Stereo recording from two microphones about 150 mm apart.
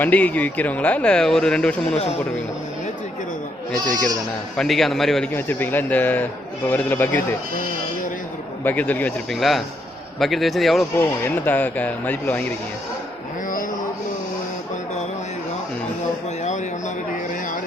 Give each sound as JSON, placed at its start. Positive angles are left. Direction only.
{"t": 0.0, "sound": "speech", "side_deg": 10}
{"t": 3.8, "sound": "speech", "side_deg": -25}
{"t": 4.5, "sound": "a man's voice", "side_deg": 0}
{"t": 5.3, "sound": "speech", "side_deg": 15}
{"t": 8.6, "sound": "a man's voice", "side_deg": 10}
{"t": 10.9, "sound": "speech", "side_deg": 15}
{"t": 16.4, "sound": "a sound", "side_deg": 50}